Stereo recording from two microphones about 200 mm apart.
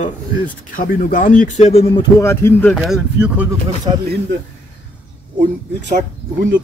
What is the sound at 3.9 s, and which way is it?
Speech, 25° right (ahead or behind).